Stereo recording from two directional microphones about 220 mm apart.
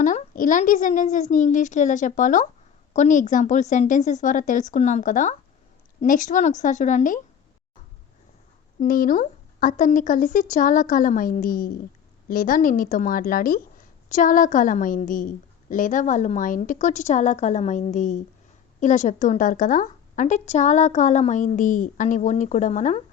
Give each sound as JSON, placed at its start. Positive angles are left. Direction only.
{"t": 0.0, "sound": "a woman's voice", "side_deg": 35}
{"t": 8.8, "sound": "a woman's voice", "side_deg": 40}